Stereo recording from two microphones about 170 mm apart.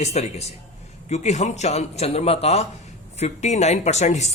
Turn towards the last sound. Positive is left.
turn(degrees=40)  # may be behind; listen again after turning